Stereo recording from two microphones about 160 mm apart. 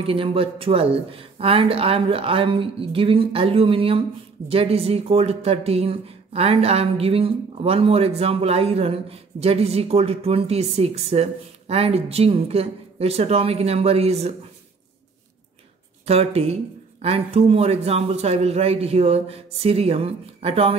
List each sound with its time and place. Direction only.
0.0 s speech: 35° right (ahead or behind)
16.1 s speech: 40° right (ahead or behind)